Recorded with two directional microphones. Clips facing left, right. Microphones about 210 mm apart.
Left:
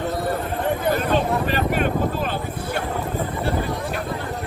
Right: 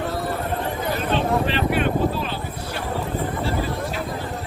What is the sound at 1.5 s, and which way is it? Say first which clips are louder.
Vehicle: even; 45° left (ahead or behind).